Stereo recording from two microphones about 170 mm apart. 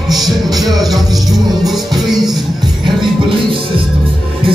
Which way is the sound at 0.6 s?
Centre (ahead or behind).